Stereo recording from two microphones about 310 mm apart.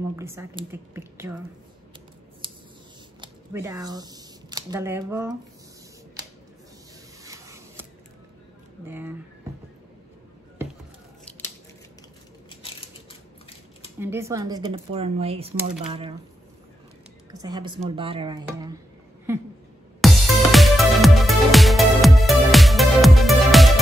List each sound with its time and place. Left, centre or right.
0.1 s speech: centre
3.2 s speech: centre
7.2 s a sound: centre
8.8 s speech: centre
11.2 s a sound: centre
13.9 s speech: centre
17.3 s speech: centre
20.0 s music: centre